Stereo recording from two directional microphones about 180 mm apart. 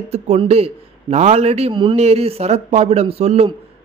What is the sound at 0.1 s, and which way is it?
A man's voice, 35° right (ahead or behind).